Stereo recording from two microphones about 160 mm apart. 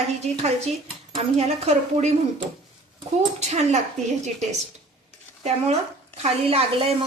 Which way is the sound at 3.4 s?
45° right (ahead or behind).